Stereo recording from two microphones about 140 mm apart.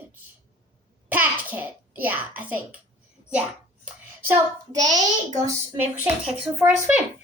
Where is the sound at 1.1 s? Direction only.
10° right (ahead or behind).